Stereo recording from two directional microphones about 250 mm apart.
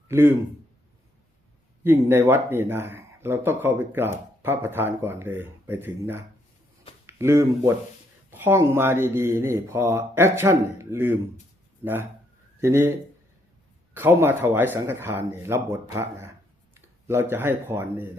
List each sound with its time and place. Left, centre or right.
0.1 s speech: centre
1.8 s speech: centre
12.5 s a man's voice: centre
13.9 s speech: centre